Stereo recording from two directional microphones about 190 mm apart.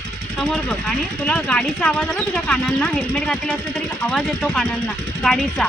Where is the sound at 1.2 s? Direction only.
5° left (ahead or behind).